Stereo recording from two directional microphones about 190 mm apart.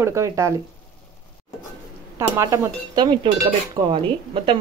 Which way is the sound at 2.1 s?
15° right (ahead or behind).